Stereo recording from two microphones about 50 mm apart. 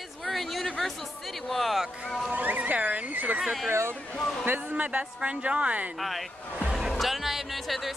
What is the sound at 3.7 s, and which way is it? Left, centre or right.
Speech, right.